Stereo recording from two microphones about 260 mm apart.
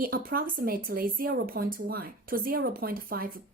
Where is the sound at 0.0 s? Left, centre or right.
Right.